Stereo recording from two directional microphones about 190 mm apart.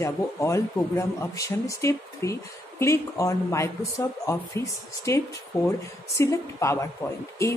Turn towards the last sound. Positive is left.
turn(degrees=15)  # may be behind; listen again after turning